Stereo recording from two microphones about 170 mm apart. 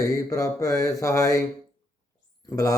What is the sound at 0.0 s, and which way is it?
Speech, 20° left (ahead or behind).